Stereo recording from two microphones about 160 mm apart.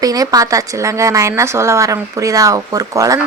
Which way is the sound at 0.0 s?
20° right (ahead or behind).